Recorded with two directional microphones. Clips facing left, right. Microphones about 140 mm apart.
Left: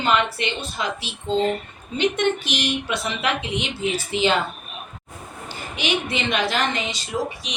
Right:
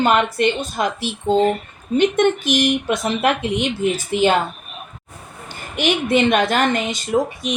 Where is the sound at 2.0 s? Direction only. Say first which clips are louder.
Right 5 dB; 50° right (ahead or behind).